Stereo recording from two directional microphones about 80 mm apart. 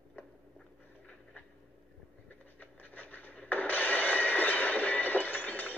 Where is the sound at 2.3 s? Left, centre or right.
Left.